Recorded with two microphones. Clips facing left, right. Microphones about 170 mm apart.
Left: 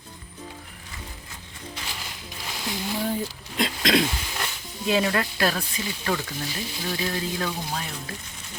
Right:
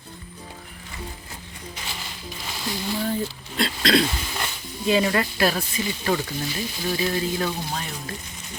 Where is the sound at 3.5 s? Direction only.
15° left (ahead or behind).